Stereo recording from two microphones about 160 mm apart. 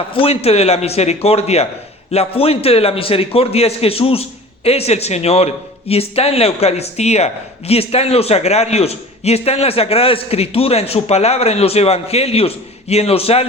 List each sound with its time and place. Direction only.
0.1 s a man's voice: 35° left (ahead or behind)